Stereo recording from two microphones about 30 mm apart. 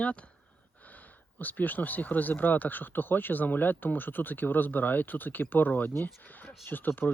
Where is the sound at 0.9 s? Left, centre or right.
Left.